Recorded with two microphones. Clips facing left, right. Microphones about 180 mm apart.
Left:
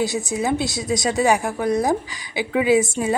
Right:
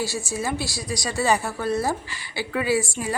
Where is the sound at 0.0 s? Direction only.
20° left (ahead or behind).